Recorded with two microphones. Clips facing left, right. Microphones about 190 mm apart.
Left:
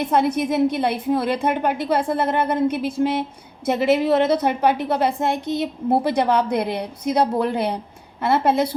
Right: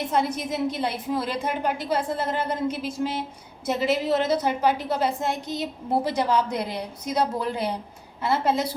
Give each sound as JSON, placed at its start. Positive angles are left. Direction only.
{"t": 0.1, "sound": "a woman's voice", "side_deg": 60}